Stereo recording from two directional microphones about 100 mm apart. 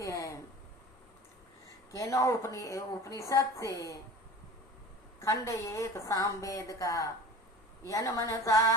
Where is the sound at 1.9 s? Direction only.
30° left (ahead or behind).